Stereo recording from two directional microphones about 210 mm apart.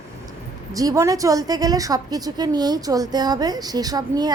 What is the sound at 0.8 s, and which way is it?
A woman's voice, 15° right (ahead or behind).